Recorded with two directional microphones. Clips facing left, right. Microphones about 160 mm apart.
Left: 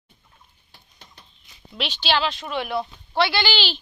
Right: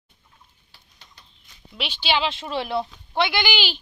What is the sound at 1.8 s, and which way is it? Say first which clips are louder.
Speech: left 1 dB; 10° right (ahead or behind).